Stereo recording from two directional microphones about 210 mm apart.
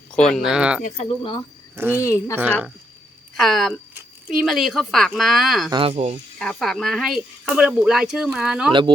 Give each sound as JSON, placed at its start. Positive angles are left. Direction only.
{"t": 0.1, "sound": "speech", "side_deg": 5}
{"t": 0.9, "sound": "speech", "side_deg": 25}
{"t": 1.7, "sound": "speech", "side_deg": -10}
{"t": 2.0, "sound": "a woman's voice", "side_deg": 15}
{"t": 3.3, "sound": "a sound", "side_deg": 0}
{"t": 4.4, "sound": "speech", "side_deg": 0}
{"t": 5.7, "sound": "speech", "side_deg": -25}
{"t": 6.4, "sound": "speech", "side_deg": 0}